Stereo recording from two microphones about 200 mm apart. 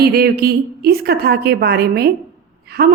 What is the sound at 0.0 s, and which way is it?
A woman's voice, 50° right (ahead or behind).